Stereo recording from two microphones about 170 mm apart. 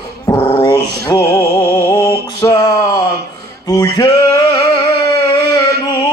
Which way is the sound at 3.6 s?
20° left (ahead or behind).